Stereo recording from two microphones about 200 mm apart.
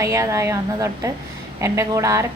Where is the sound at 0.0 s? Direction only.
15° right (ahead or behind).